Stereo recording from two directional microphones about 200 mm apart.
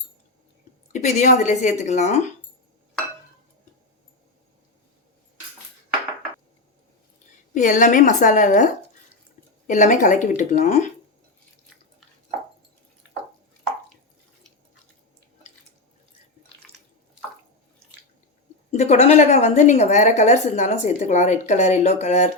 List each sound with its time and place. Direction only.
0.9 s a woman's voice: 35° left (ahead or behind)
7.5 s a woman's voice: 40° left (ahead or behind)
18.7 s a woman's voice: 35° left (ahead or behind)